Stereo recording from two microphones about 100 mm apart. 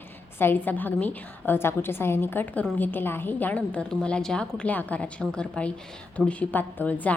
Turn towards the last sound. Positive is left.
turn(degrees=15)  # may be behind; listen again after turning